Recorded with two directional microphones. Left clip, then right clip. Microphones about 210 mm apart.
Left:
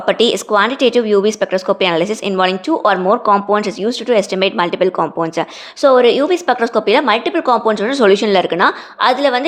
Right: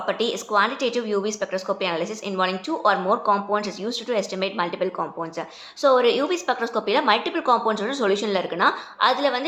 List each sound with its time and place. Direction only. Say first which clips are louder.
0.0 s a woman's voice: left 11 dB; 45° left (ahead or behind)